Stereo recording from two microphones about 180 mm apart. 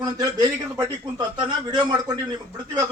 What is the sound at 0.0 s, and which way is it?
A man's voice, 20° right (ahead or behind).